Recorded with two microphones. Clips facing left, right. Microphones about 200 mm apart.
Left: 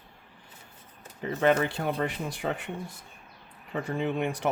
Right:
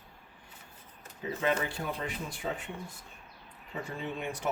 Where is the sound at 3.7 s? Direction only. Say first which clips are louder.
Left 8 dB; 85° left.